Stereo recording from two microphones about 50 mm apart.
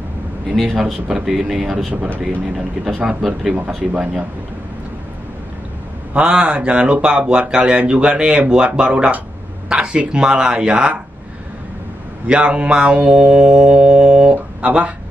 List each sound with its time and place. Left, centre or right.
0.6 s speech: centre
3.2 s speech: centre
3.5 s speech: right
6.1 s speech: right
12.3 s speech: right